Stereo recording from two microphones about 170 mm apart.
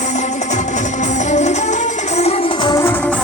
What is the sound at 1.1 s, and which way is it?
Music, 45° left (ahead or behind).